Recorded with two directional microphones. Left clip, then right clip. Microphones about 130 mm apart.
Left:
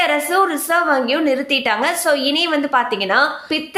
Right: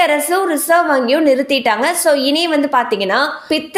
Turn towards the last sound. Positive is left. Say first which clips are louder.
# right 3 dB
turn(degrees=-30)  # may be behind; listen again after turning